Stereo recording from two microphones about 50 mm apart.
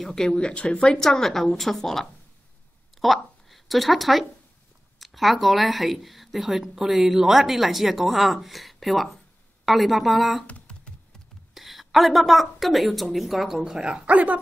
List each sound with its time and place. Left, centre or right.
0.0 s speech: centre
10.4 s computer keyboard: left
11.5 s speech: centre; by 14.4 s right